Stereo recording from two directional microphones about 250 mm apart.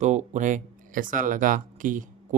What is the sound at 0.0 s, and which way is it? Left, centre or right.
Speech, right.